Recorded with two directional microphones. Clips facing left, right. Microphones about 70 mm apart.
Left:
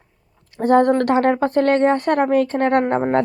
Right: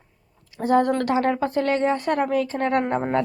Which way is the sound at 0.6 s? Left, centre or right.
Left.